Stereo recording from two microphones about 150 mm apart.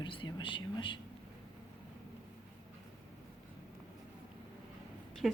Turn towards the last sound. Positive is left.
turn(degrees=-5)  # may be behind; listen again after turning